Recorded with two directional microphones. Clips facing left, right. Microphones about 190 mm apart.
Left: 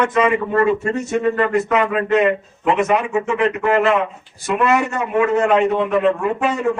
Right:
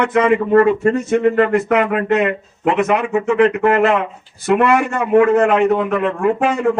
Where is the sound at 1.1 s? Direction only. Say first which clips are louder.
Right 2 dB; 60° right (ahead or behind).